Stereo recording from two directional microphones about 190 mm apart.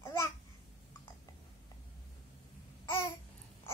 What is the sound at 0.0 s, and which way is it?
Babbling, 15° left (ahead or behind).